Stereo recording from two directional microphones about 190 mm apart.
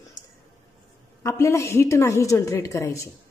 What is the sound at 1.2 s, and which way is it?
A woman's voice, 15° left (ahead or behind).